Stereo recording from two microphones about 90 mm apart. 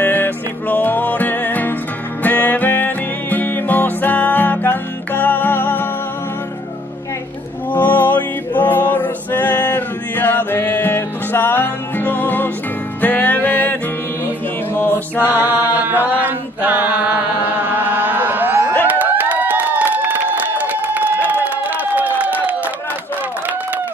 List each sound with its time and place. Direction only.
0.0 s music: 20° left (ahead or behind)
7.7 s male singing: 20° left (ahead or behind)
13.0 s music: 20° left (ahead or behind)
14.2 s mantra: 25° left (ahead or behind)
15.1 s mantra: 20° right (ahead or behind)
15.7 s chant: 20° right (ahead or behind)
18.9 s a sound: 20° right (ahead or behind)